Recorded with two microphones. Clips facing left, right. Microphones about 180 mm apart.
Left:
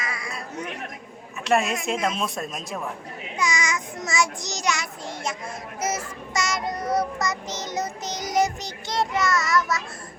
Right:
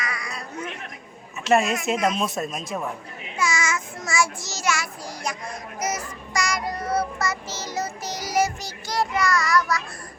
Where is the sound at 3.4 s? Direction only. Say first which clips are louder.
Right 1 dB; 15° left (ahead or behind).